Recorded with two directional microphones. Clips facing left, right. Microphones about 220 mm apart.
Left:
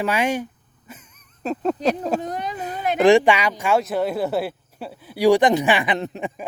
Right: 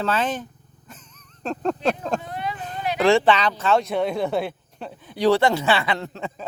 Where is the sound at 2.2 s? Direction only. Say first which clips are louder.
Left 3 dB; 40° left (ahead or behind).